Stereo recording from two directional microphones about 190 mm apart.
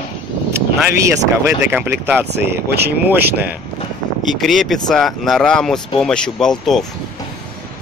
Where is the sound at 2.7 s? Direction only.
55° right (ahead or behind).